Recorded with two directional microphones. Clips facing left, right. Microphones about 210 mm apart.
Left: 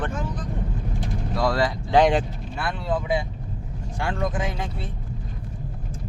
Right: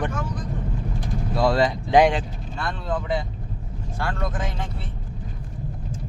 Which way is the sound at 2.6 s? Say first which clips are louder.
Left 1 dB; 10° left (ahead or behind).